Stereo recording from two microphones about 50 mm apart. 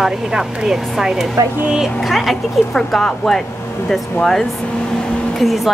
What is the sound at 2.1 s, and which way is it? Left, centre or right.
A woman's voice, centre.